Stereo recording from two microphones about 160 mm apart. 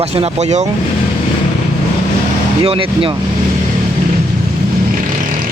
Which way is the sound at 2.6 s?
35° right (ahead or behind).